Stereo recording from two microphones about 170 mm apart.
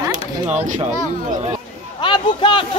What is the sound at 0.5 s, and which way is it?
A man's voice, 45° right (ahead or behind).